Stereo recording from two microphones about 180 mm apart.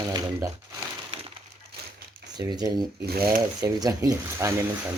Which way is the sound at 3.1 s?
60° right (ahead or behind).